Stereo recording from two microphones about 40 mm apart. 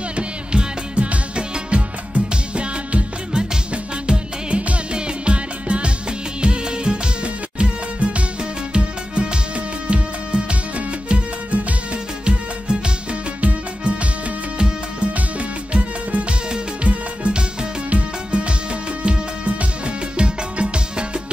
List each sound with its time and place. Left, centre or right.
0.1 s music: right
4.1 s music: right
15.1 s music: right
16.4 s music: right